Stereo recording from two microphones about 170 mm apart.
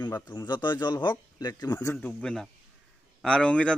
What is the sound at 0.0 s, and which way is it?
A man's voice, 20° left (ahead or behind).